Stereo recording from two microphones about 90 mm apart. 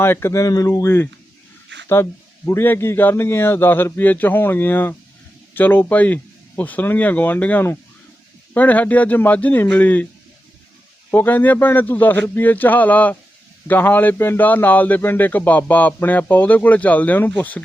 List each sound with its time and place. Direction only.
0.0 s a man's voice: 30° left (ahead or behind)
2.5 s a man's voice: 30° left (ahead or behind)
11.1 s a man's voice: 20° left (ahead or behind)